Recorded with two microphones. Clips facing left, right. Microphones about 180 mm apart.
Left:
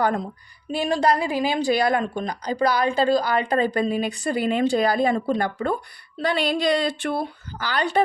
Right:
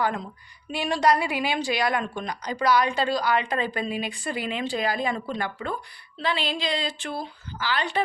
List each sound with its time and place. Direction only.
0.0 s a woman's voice: 40° left (ahead or behind); by 7.7 s 60° left (ahead or behind)
7.7 s speech: 45° left (ahead or behind)